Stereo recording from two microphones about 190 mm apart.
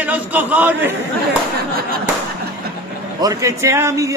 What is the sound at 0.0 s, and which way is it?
Speech, 10° right (ahead or behind).